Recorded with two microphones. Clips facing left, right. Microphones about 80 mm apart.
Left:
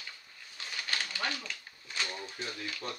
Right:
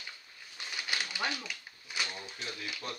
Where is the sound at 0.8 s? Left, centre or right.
Centre.